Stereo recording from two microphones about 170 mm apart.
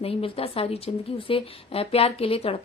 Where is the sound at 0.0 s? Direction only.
35° left (ahead or behind).